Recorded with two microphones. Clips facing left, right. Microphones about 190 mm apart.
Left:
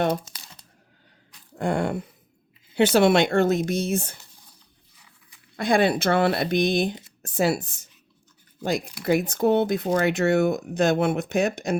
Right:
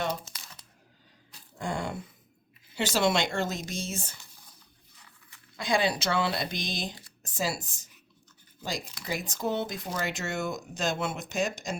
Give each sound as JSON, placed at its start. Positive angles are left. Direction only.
{"t": 1.5, "sound": "speech", "side_deg": 60}
{"t": 4.9, "sound": "dog", "side_deg": 10}
{"t": 5.5, "sound": "speech", "side_deg": 55}
{"t": 9.0, "sound": "speech", "side_deg": 60}